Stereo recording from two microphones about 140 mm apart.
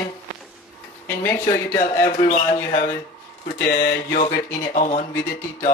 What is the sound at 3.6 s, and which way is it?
Mantra, 85° left.